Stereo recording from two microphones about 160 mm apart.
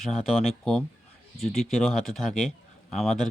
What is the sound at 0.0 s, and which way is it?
Speech, centre (ahead or behind).